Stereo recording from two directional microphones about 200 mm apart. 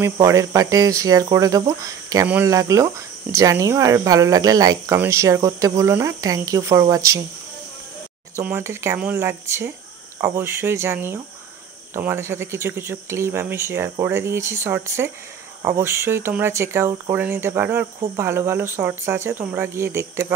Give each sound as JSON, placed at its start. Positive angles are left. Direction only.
{"t": 0.0, "sound": "speech", "side_deg": -15}
{"t": 8.4, "sound": "speech", "side_deg": -10}